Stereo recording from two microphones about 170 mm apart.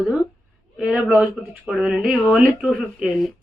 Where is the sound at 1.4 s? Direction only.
Centre (ahead or behind).